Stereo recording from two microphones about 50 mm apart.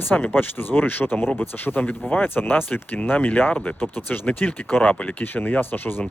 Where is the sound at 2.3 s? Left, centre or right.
Left.